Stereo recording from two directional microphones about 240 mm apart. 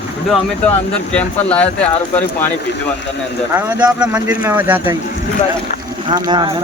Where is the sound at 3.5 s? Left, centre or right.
Centre.